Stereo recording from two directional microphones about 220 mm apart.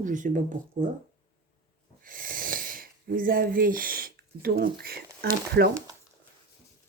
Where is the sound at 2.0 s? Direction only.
40° right (ahead or behind).